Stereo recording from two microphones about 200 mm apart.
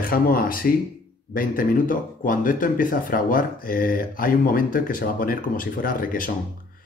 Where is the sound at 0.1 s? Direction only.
45° left (ahead or behind).